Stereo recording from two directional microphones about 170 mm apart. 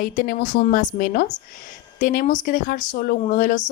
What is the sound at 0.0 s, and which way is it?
A woman's voice, 55° left (ahead or behind).